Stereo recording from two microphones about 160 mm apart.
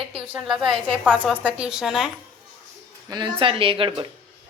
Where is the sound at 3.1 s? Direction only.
30° right (ahead or behind).